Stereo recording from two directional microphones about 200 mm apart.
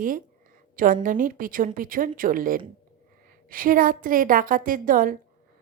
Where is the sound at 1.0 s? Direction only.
45° right (ahead or behind).